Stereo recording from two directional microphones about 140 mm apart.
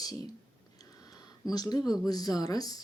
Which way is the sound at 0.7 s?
30° left (ahead or behind).